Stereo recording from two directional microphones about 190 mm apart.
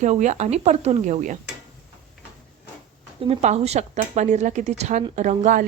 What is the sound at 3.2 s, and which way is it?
A woman's voice, 35° right (ahead or behind).